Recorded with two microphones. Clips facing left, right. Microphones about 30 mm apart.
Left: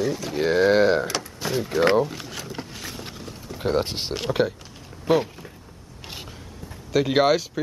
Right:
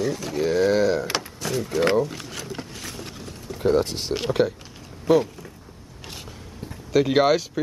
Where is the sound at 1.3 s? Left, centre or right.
Centre.